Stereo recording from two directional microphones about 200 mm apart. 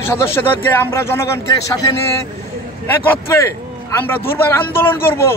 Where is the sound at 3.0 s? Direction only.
15° left (ahead or behind).